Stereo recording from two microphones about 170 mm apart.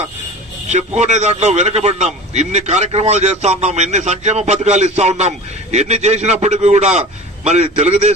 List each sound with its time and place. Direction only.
0.7 s a man's voice: 40° right (ahead or behind)